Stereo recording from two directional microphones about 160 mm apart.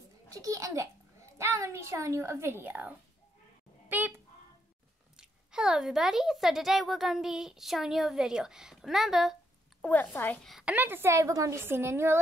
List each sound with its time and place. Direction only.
0.3 s a child's voice: 20° right (ahead or behind)
5.1 s speech: 5° right (ahead or behind)
9.8 s a woman's voice: 10° left (ahead or behind)
10.4 s a woman's voice: 5° right (ahead or behind)